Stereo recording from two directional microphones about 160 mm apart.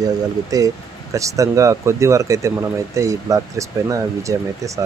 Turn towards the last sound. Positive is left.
turn(degrees=-20)  # may be behind; listen again after turning